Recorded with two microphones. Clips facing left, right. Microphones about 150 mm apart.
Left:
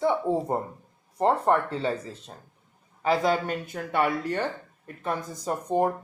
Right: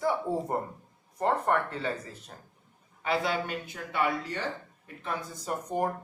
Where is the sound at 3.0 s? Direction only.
40° left (ahead or behind).